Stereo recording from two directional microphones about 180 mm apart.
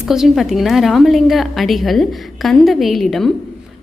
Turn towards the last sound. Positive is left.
turn(degrees=0)  # may be behind; listen again after turning